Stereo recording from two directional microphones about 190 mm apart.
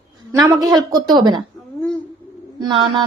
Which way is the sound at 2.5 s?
25° right (ahead or behind).